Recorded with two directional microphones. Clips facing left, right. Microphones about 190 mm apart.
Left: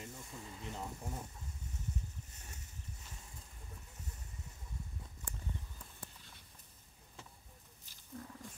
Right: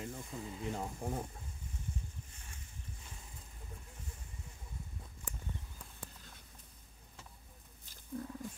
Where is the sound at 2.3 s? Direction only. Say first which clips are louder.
Left 1 dB; 40° left (ahead or behind).